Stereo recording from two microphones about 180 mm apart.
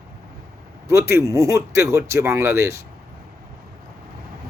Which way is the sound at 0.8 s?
15° right (ahead or behind).